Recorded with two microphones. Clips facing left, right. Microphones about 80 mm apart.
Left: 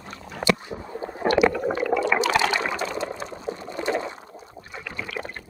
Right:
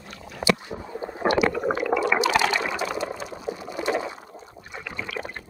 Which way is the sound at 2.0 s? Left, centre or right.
Centre.